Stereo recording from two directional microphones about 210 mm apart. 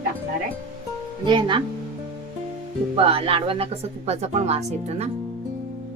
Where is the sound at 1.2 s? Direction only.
20° right (ahead or behind).